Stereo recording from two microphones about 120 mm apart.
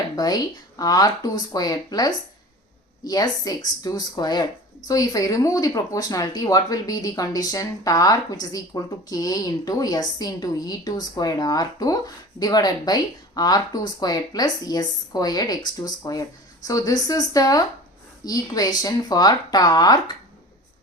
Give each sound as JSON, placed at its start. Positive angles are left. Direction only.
{"t": 0.2, "sound": "speech", "side_deg": 35}